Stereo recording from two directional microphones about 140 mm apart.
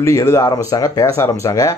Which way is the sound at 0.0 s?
20° left (ahead or behind).